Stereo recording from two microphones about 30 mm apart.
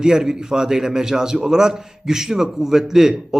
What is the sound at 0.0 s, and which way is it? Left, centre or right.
A man's voice, right.